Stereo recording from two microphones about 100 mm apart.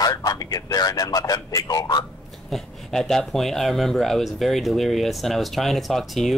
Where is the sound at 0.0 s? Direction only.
40° left (ahead or behind).